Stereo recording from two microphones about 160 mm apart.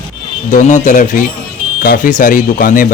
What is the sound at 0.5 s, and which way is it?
A man's voice, 50° left (ahead or behind).